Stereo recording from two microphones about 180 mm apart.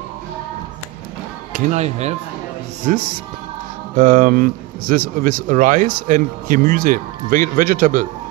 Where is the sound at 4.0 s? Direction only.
45° right (ahead or behind).